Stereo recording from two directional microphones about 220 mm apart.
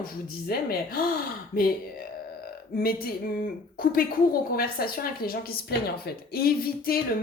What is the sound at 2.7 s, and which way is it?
Speech, 45° left (ahead or behind).